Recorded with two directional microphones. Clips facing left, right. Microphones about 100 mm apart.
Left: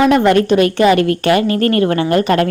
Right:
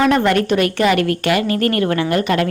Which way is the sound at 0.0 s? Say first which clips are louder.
Left 4 dB; 15° left (ahead or behind).